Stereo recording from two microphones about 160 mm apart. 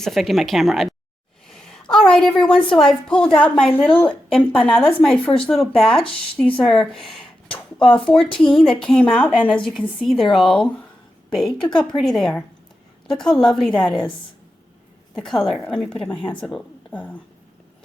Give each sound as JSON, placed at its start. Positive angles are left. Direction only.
{"t": 0.0, "sound": "a woman's voice", "side_deg": 0}
{"t": 7.5, "sound": "a sound", "side_deg": 35}
{"t": 7.9, "sound": "a woman's voice", "side_deg": 5}
{"t": 15.2, "sound": "a woman's voice", "side_deg": 5}